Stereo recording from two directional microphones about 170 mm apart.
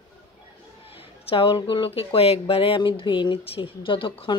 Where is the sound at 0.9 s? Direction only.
35° left (ahead or behind).